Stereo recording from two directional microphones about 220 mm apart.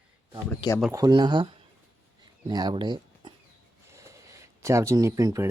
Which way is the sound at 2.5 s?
20° right (ahead or behind).